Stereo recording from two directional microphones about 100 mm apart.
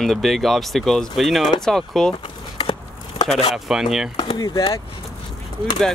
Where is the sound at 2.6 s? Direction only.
45° left (ahead or behind).